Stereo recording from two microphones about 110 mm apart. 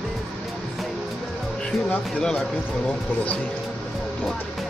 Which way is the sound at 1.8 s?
10° left (ahead or behind).